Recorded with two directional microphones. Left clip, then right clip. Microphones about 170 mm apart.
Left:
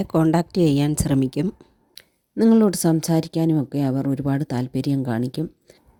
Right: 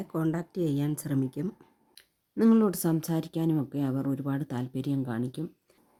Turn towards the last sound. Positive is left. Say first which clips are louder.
# left 8 dB
turn(degrees=40)  # may be behind; listen again after turning